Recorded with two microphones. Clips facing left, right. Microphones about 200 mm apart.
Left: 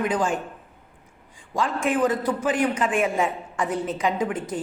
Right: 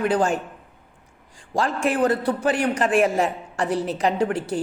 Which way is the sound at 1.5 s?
70° right (ahead or behind).